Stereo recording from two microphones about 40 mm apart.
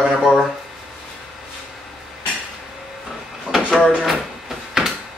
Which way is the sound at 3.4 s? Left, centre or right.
Centre.